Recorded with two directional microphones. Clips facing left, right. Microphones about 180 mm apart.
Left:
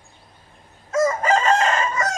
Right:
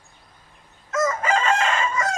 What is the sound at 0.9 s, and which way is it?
Chicken, 30° left (ahead or behind).